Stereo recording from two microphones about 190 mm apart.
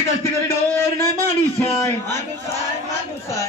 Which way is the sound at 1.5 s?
15° left (ahead or behind).